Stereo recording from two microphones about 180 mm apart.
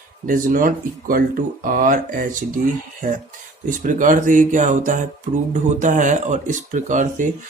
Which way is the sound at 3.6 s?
45° right (ahead or behind).